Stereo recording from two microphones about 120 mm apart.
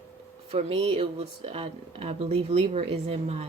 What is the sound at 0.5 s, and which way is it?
Speech, 50° right (ahead or behind).